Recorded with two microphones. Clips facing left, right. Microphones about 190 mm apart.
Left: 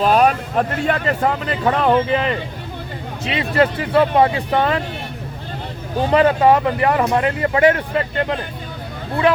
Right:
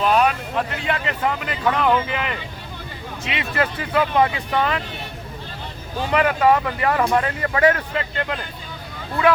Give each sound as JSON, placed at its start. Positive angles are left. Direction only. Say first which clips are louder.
{"t": 0.0, "sound": "speech", "louder": "left 4 dB", "side_deg": 40}
{"t": 6.0, "sound": "speech", "louder": "left 5 dB", "side_deg": 30}